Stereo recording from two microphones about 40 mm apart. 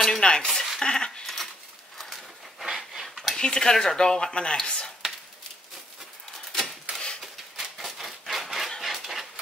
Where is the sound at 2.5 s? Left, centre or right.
Centre.